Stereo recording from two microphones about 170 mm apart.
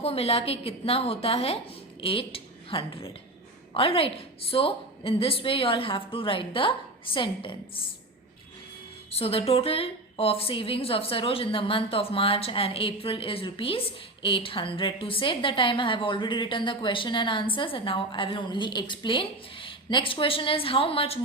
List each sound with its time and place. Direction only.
0.0 s a woman's voice: 35° left (ahead or behind)
9.0 s a woman's voice: 35° left (ahead or behind)